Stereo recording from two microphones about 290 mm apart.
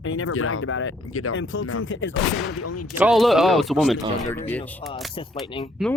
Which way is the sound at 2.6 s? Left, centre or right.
Left.